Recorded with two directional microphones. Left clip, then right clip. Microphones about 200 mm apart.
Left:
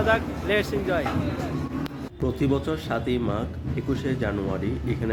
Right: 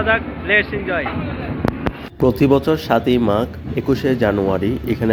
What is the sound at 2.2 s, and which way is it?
Speech, 35° right (ahead or behind).